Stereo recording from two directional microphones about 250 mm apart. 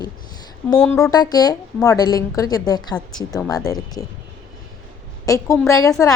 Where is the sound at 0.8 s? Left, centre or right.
Centre.